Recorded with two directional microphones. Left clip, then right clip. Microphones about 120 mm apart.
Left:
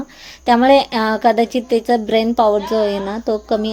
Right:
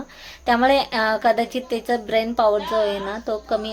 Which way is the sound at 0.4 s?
30° left (ahead or behind).